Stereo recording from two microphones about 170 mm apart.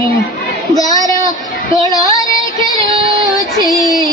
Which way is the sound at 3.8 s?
20° left (ahead or behind).